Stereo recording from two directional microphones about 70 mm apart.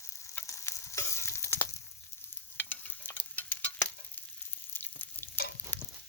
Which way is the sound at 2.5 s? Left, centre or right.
Left.